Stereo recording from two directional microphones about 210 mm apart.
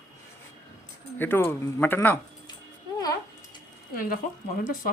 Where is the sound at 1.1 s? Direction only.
10° left (ahead or behind).